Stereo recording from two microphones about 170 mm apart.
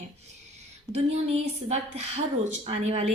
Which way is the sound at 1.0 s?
40° right (ahead or behind).